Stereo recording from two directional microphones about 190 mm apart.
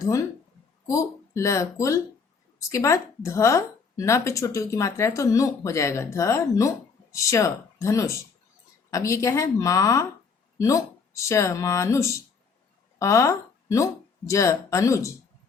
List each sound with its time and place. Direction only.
0.0 s a woman's voice: 15° left (ahead or behind)